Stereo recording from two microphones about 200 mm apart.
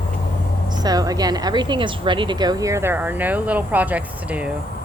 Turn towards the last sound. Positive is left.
turn(degrees=-5)  # may be behind; listen again after turning